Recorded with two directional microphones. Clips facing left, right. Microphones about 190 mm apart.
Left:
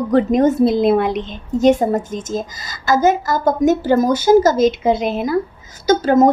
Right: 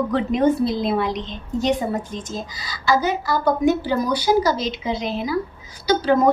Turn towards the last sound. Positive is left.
turn(degrees=45)  # may be behind; listen again after turning